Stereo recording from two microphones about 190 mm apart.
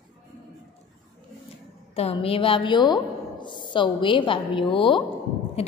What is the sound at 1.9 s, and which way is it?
A woman's voice, 30° left (ahead or behind).